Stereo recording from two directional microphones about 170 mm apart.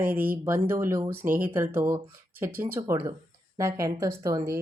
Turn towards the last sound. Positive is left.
turn(degrees=-20)  # may be behind; listen again after turning